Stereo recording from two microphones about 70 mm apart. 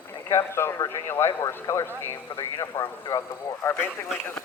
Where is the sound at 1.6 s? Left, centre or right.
Left.